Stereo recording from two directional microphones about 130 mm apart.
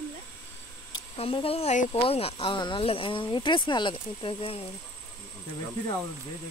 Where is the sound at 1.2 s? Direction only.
45° left (ahead or behind).